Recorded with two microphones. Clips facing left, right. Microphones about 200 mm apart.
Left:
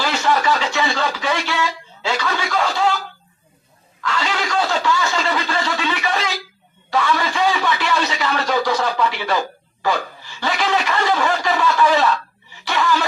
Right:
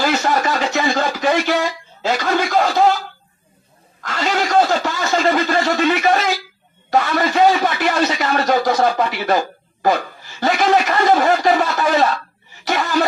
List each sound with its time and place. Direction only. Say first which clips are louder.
0.0 s speech: right 1 dB; 45° right (ahead or behind)
4.0 s a man's voice: right 3 dB; 45° right (ahead or behind)